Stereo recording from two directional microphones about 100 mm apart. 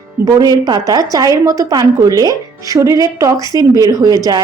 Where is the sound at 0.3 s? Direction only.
40° right (ahead or behind).